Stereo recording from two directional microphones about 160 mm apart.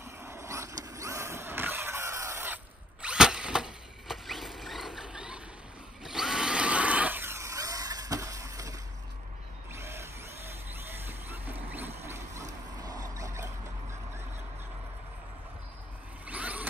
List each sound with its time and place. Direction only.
0.2 s vehicle: 15° right (ahead or behind)
6.0 s a sound: 5° right (ahead or behind); by 13.5 s 20° right (ahead or behind)
16.3 s vehicle: 10° right (ahead or behind)